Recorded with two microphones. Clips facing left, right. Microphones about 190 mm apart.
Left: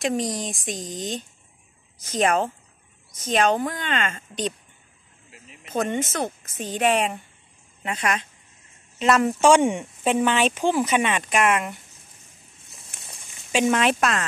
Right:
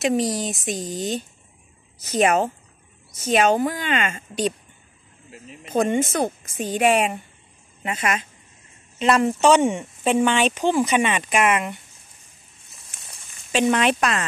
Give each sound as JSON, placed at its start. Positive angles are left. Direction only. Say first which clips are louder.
{"t": 0.0, "sound": "a woman's voice", "louder": "right 4 dB", "side_deg": -5}
{"t": 5.3, "sound": "speech", "louder": "right 8 dB", "side_deg": -35}
{"t": 5.7, "sound": "a woman's voice", "louder": "right 5 dB", "side_deg": -15}
{"t": 13.5, "sound": "speech", "louder": "right 1 dB", "side_deg": 5}